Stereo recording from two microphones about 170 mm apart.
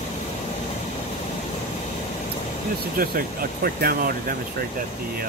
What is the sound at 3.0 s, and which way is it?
Speech, 60° right (ahead or behind).